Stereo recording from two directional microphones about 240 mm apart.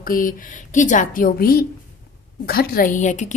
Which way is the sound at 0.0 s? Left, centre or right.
Left.